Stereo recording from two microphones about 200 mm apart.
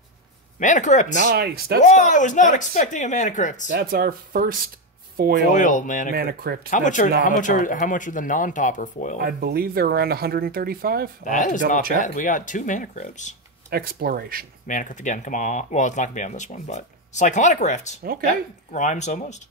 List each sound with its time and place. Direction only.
0.6 s speech: 35° left (ahead or behind)
1.3 s speech: 50° right (ahead or behind)
1.8 s speech: 40° left (ahead or behind)
3.6 s speech: 45° right (ahead or behind)
5.5 s speech: 40° left (ahead or behind)
6.1 s speech: 50° right (ahead or behind)
6.7 s speech: 40° left (ahead or behind)
9.2 s speech: 50° right (ahead or behind)
11.2 s speech: 40° left (ahead or behind)
13.7 s speech: 50° right (ahead or behind)
14.7 s speech: 40° left (ahead or behind)